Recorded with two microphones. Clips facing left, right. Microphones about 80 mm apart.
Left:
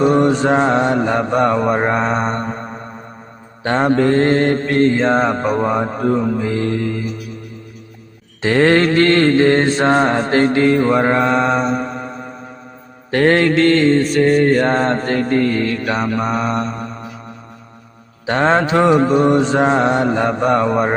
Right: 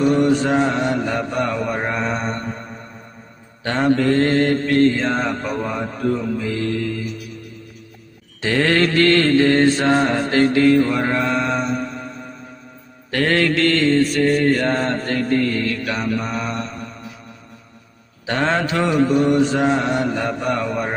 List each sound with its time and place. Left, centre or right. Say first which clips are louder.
0.0 s mantra: left 3 dB; left
8.4 s mantra: left 5 dB; left
18.3 s mantra: left 5 dB; left